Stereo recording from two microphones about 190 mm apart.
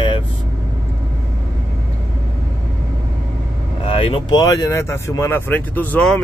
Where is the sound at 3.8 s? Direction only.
30° left (ahead or behind).